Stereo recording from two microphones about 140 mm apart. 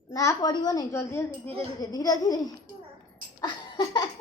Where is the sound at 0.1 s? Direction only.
20° left (ahead or behind).